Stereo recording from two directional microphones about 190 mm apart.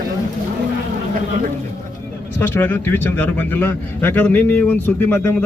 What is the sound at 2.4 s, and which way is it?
A man's voice, 10° left (ahead or behind).